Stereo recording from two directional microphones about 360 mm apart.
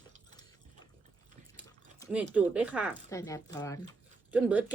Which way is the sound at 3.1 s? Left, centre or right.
Centre.